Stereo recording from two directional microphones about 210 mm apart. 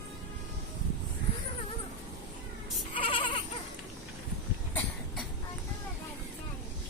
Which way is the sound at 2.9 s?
25° left (ahead or behind).